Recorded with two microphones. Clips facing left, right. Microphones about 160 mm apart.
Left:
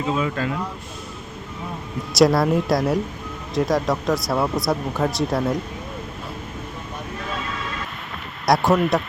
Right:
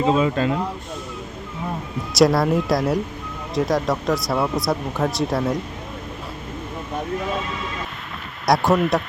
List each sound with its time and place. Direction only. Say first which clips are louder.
0.2 s speech: right 4 dB; 25° right (ahead or behind)
2.1 s speech: even; centre (ahead or behind)
8.4 s speech: even; centre (ahead or behind)